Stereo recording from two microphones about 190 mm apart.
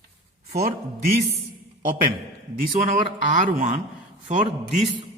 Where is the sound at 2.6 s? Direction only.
40° right (ahead or behind).